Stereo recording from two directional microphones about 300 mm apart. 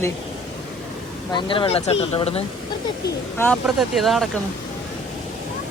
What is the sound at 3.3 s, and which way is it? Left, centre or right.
Speech, centre.